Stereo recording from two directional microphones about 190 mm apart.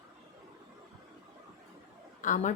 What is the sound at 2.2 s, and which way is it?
Speech, 40° left (ahead or behind).